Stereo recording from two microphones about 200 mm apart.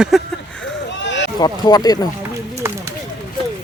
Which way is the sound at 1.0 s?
65° left (ahead or behind).